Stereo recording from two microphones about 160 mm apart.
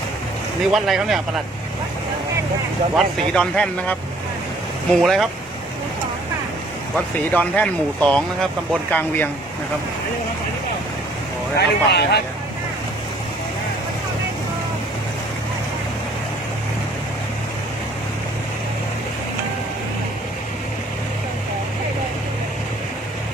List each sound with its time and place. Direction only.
0.7 s speech: centre (ahead or behind)
2.9 s speech: 5° left (ahead or behind)
4.9 s speech: centre (ahead or behind)
6.9 s speech: 10° left (ahead or behind)
11.5 s speech: 90° left